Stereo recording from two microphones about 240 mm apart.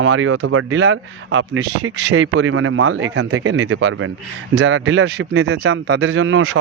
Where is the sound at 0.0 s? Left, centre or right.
Right.